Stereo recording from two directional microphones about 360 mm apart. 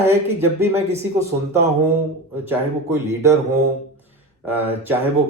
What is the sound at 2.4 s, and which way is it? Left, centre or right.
Speech, centre.